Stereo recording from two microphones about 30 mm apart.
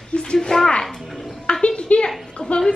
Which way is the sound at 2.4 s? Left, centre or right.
Left.